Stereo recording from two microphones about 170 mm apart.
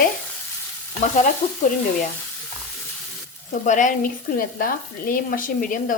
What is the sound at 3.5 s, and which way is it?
Speech, 50° left (ahead or behind).